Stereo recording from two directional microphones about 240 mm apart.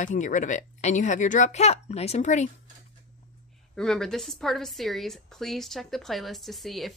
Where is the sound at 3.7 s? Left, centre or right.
Centre.